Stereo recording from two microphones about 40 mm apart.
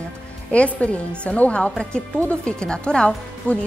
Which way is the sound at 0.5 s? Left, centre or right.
Left.